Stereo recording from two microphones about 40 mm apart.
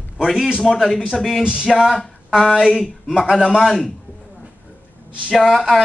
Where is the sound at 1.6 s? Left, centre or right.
Centre.